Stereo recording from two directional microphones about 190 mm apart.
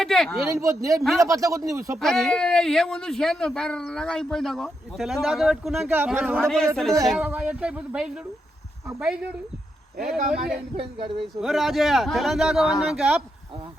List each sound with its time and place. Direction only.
0.0 s speech: centre (ahead or behind)
0.4 s speech: 15° right (ahead or behind)
2.0 s speech: centre (ahead or behind)
10.0 s speech: centre (ahead or behind)